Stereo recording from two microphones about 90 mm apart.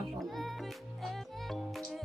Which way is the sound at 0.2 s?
Centre (ahead or behind).